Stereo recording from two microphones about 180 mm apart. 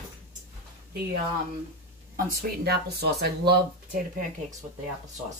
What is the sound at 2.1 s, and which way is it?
Speech, 60° right (ahead or behind).